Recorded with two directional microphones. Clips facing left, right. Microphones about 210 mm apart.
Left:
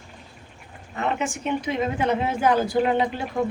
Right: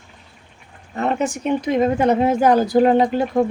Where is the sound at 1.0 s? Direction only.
40° right (ahead or behind).